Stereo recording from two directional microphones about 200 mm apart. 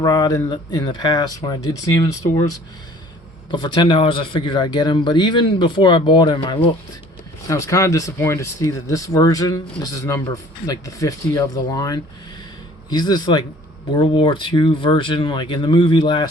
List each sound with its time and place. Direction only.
0.0 s speech: 20° left (ahead or behind)